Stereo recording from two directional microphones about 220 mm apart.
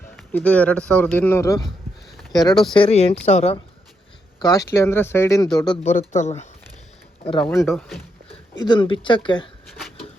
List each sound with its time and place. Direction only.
0.2 s speech: 5° left (ahead or behind); by 3.6 s 30° left (ahead or behind)
4.4 s speech: 15° left (ahead or behind)
5.8 s speech: 35° left (ahead or behind)
7.4 s speech: 15° left (ahead or behind)
7.7 s speech: centre (ahead or behind)
8.3 s speech: 20° left (ahead or behind)